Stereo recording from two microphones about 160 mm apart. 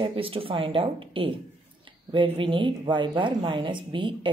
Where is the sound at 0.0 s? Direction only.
35° right (ahead or behind).